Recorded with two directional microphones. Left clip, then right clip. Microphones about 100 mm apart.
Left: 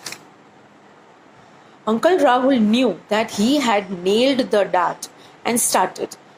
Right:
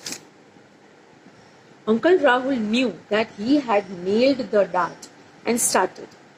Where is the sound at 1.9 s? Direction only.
35° left (ahead or behind).